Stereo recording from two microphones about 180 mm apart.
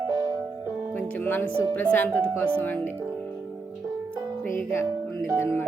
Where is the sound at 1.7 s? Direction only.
10° left (ahead or behind).